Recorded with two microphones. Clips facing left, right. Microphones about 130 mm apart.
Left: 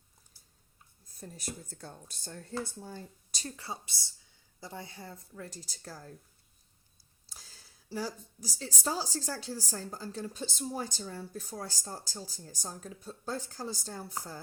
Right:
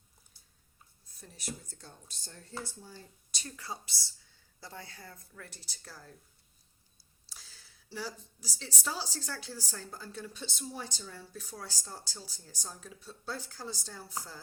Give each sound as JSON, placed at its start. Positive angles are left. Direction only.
{"t": 1.2, "sound": "speech", "side_deg": 50}
{"t": 3.4, "sound": "speech", "side_deg": 25}
{"t": 5.5, "sound": "a woman's voice", "side_deg": 40}
{"t": 7.3, "sound": "a woman's voice", "side_deg": 40}